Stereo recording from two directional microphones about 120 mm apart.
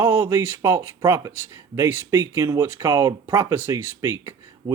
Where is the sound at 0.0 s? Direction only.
20° right (ahead or behind).